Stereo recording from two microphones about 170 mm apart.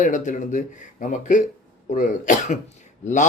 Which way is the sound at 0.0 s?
45° left (ahead or behind).